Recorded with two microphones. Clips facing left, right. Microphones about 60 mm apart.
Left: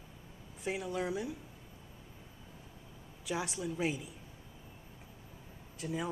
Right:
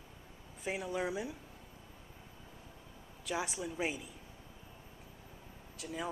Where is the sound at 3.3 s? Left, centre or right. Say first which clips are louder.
Left 1 dB; centre.